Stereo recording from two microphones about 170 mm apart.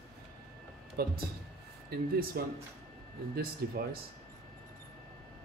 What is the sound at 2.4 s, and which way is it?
Speech, 65° right (ahead or behind).